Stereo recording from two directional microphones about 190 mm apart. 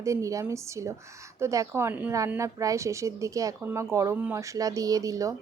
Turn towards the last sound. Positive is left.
turn(degrees=-15)  # may be behind; listen again after turning